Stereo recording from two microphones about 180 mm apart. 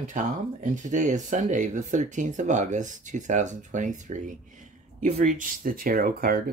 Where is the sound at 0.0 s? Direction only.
45° right (ahead or behind).